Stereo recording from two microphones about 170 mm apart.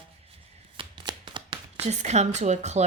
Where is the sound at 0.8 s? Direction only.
30° right (ahead or behind).